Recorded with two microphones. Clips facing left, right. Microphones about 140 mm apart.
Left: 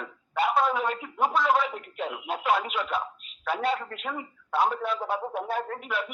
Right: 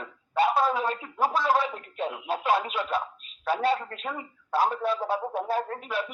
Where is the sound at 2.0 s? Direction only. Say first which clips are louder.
Right 2 dB; 30° right (ahead or behind).